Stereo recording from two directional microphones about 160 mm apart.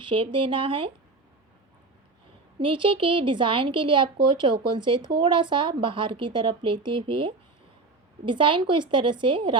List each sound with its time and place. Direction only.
0.0 s a woman's voice: 30° right (ahead or behind)
2.6 s a woman's voice: 30° right (ahead or behind)